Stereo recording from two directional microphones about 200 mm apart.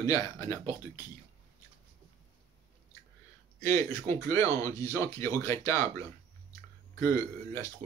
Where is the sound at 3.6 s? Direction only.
15° left (ahead or behind).